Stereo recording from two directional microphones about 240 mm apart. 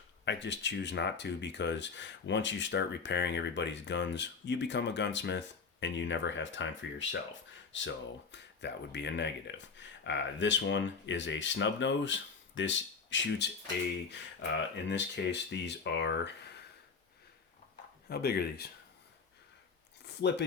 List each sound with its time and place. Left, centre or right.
0.3 s speech: left
14.8 s speech: left
18.1 s speech: left